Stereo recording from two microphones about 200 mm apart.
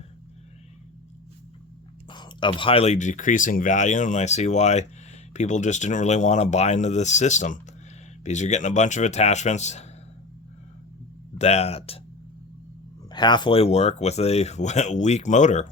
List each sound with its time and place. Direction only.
2.0 s speech: 25° left (ahead or behind)
11.3 s speech: 30° left (ahead or behind)
13.1 s speech: 20° left (ahead or behind); by 15.6 s 35° left (ahead or behind)